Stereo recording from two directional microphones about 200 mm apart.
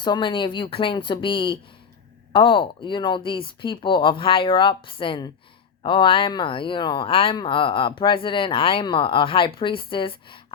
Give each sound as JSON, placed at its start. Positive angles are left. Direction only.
{"t": 0.0, "sound": "speech", "side_deg": 25}